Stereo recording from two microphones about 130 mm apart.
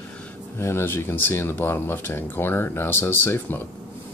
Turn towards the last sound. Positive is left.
turn(degrees=15)  # may be behind; listen again after turning